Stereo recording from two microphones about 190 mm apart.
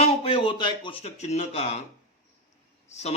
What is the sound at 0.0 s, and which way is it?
Speech, 30° left (ahead or behind).